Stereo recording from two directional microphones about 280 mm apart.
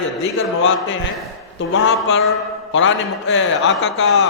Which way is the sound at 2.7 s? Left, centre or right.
Left.